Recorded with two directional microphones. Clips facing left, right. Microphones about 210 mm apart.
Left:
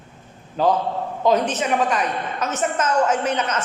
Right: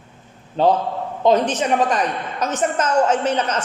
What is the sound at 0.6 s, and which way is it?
A woman's voice, 30° right (ahead or behind).